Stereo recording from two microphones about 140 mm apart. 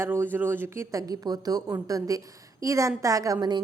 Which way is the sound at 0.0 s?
15° right (ahead or behind).